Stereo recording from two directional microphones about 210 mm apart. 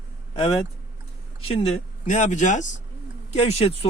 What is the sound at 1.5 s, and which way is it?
A man's voice, 30° left (ahead or behind).